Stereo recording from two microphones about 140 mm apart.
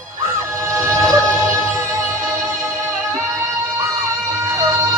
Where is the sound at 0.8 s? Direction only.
20° right (ahead or behind).